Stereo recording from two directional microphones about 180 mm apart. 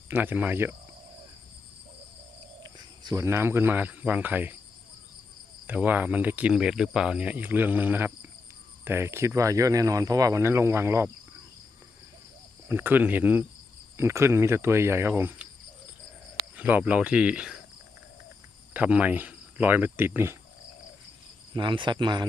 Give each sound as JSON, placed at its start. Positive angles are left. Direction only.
{"t": 0.1, "sound": "speech", "side_deg": -10}
{"t": 2.6, "sound": "speech", "side_deg": -25}
{"t": 5.6, "sound": "speech", "side_deg": -10}
{"t": 12.6, "sound": "speech", "side_deg": -10}
{"t": 16.6, "sound": "speech", "side_deg": -10}
{"t": 18.7, "sound": "speech", "side_deg": -10}
{"t": 21.5, "sound": "speech", "side_deg": -25}